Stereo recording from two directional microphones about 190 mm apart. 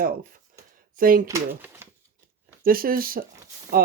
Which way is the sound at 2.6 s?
50° right (ahead or behind).